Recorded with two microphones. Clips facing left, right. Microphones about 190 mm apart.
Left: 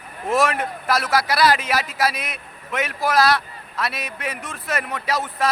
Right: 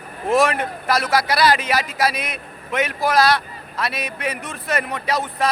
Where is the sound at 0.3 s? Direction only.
Centre (ahead or behind).